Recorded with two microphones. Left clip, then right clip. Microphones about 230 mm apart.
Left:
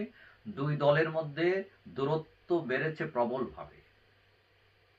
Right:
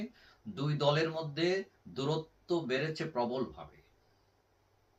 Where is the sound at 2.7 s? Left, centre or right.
Right.